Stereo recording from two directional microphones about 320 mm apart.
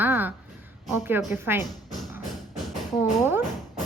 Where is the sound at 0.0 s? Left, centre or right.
Centre.